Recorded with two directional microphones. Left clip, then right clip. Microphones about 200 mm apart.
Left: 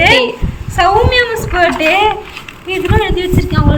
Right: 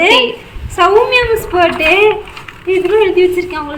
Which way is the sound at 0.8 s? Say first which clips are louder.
Right 1 dB; 20° right (ahead or behind).